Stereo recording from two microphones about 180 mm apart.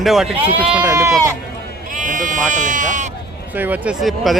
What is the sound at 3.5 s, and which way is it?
Speech, 10° right (ahead or behind).